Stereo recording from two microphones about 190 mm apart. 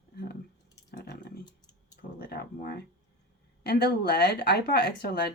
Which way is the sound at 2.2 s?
55° left (ahead or behind).